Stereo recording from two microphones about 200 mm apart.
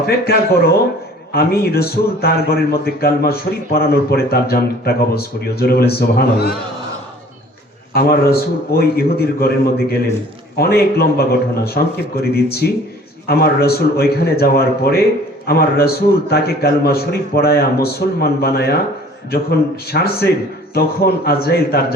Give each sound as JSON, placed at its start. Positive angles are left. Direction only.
{"t": 0.3, "sound": "a man's voice", "side_deg": 50}
{"t": 7.9, "sound": "a man's voice", "side_deg": 50}